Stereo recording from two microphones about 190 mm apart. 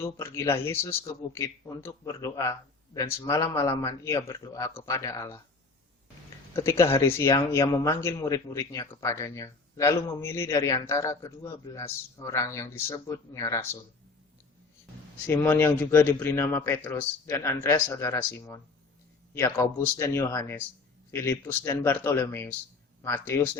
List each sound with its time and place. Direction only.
0.0 s speech: 15° left (ahead or behind)
6.5 s speech: 15° left (ahead or behind)
15.3 s speech: 10° left (ahead or behind)